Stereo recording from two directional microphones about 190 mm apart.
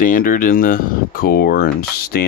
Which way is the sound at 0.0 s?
45° left (ahead or behind).